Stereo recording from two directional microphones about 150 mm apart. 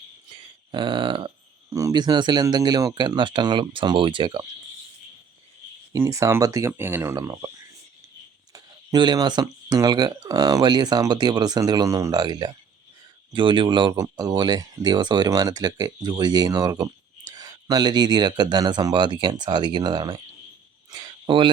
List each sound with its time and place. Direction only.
0.3 s a sound: 35° right (ahead or behind)
1.7 s speech: 25° right (ahead or behind)
5.9 s speech: 20° right (ahead or behind)
7.2 s speech: 30° right (ahead or behind)
8.5 s speech: 25° right (ahead or behind)
20.9 s a sound: 30° right (ahead or behind)